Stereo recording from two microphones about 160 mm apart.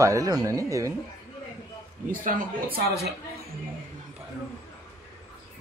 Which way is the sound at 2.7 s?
90° right.